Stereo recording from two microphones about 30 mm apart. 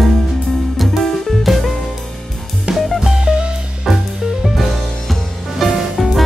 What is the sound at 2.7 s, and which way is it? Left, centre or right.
Music, right.